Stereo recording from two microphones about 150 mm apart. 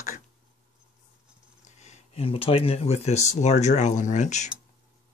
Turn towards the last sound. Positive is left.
turn(degrees=50)  # may be behind; listen again after turning